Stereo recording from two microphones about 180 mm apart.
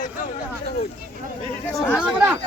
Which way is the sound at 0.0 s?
45° left (ahead or behind).